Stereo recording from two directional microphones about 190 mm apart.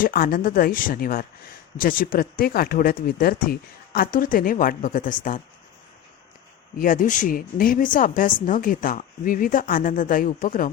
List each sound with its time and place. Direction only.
0.0 s speech: 50° left (ahead or behind)
6.7 s speech: 45° left (ahead or behind)